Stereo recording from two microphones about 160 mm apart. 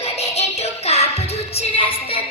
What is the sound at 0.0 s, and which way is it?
Music, 40° left (ahead or behind).